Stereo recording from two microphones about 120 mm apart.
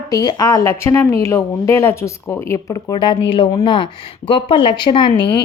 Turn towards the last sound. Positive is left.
turn(degrees=40)  # may be behind; listen again after turning